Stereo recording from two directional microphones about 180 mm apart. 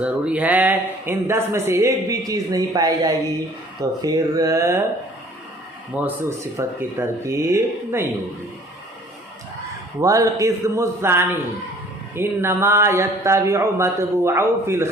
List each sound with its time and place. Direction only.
0.0 s speech: 5° right (ahead or behind)
5.9 s speech: 10° right (ahead or behind)
10.0 s speech: 20° right (ahead or behind)